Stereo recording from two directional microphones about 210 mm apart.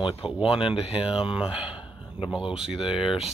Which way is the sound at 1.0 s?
5° right (ahead or behind).